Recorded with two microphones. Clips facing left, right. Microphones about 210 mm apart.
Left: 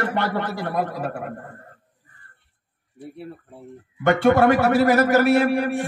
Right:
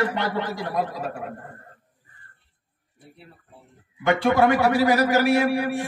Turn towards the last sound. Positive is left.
turn(degrees=55)  # may be behind; listen again after turning